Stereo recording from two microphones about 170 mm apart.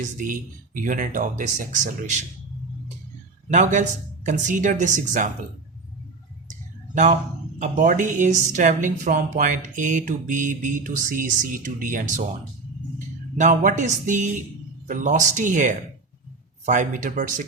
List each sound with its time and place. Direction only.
0.0 s speech: 50° right (ahead or behind)
3.5 s speech: 45° right (ahead or behind)
6.5 s a sound: 45° right (ahead or behind)
7.6 s speech: 50° right (ahead or behind)
13.3 s speech: 50° right (ahead or behind)